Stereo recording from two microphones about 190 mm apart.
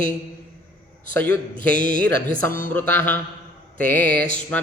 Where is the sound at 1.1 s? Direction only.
10° left (ahead or behind).